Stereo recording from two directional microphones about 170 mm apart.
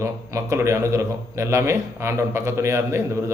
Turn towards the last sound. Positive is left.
turn(degrees=-15)  # may be behind; listen again after turning